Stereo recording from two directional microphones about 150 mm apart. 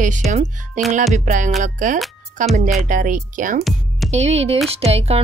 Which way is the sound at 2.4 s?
45° right (ahead or behind).